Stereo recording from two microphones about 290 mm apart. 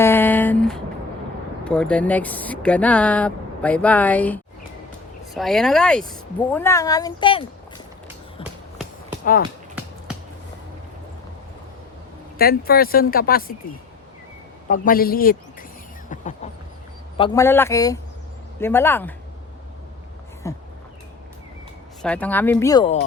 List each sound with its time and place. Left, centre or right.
0.0 s a sound: centre
1.6 s speech: centre
12.4 s speech: left
14.7 s speech: left
17.2 s speech: centre
20.4 s speech: centre
22.0 s speech: centre